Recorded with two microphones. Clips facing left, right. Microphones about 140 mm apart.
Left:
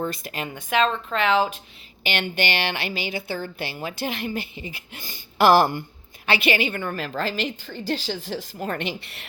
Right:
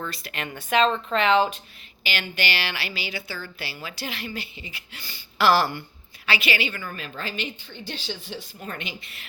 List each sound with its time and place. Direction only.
0.0 s speech: 45° left (ahead or behind)
0.4 s a woman's voice: 10° left (ahead or behind)
2.0 s a woman's voice: 55° left (ahead or behind); by 8.9 s 70° left (ahead or behind)